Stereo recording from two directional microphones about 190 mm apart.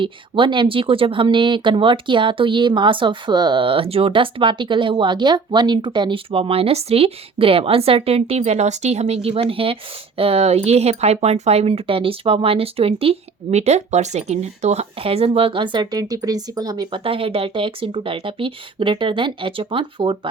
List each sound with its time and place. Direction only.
0.0 s speech: 25° right (ahead or behind)